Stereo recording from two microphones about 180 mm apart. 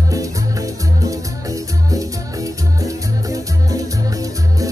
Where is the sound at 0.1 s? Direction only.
20° right (ahead or behind).